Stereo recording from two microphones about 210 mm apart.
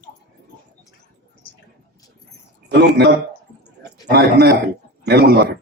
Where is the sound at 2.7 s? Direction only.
50° right (ahead or behind).